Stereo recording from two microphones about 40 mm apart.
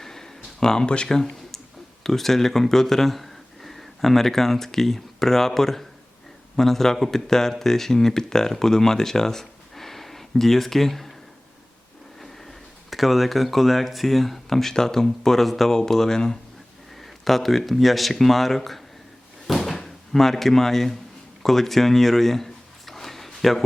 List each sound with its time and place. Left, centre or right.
0.0 s a sound: centre
0.9 s speech: left
1.1 s a sound: centre
2.0 s speech: centre
12.2 s speech: centre
17.0 s speech: centre
19.5 s door: centre
21.4 s speech: centre
22.9 s a sound: centre